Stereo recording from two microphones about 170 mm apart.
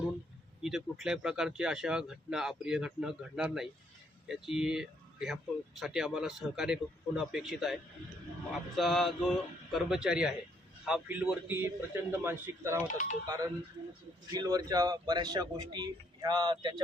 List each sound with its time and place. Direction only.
0.6 s a man's voice: centre (ahead or behind); by 16.8 s 25° right (ahead or behind)